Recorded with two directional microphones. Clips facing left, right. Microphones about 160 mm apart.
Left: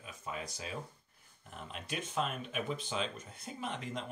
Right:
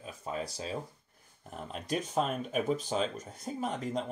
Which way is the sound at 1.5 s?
40° right (ahead or behind).